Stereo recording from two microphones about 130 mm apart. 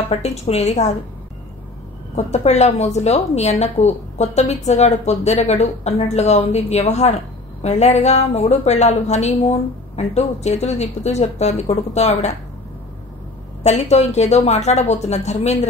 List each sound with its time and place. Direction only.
0.1 s a woman's voice: 55° left (ahead or behind)
2.1 s a woman's voice: 60° left (ahead or behind)
13.6 s a woman's voice: 60° left (ahead or behind)